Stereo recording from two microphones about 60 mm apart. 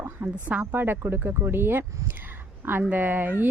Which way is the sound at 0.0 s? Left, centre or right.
Right.